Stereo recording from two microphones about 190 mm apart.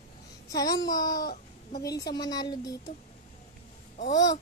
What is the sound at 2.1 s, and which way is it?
Speech, 20° left (ahead or behind).